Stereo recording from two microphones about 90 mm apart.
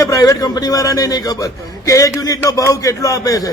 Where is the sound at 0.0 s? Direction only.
35° left (ahead or behind).